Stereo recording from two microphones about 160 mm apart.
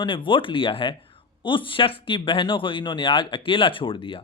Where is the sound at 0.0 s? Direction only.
30° left (ahead or behind).